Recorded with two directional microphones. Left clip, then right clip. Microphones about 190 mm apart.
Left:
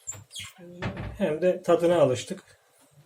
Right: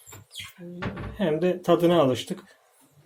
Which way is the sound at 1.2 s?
35° right (ahead or behind).